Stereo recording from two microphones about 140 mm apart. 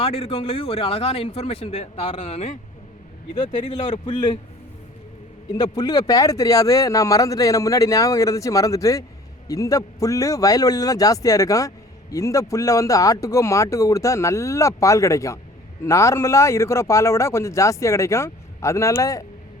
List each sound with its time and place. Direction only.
0.0 s a man's voice: 45° left (ahead or behind)
3.7 s speech: 40° left (ahead or behind)
5.5 s speech: 30° left (ahead or behind)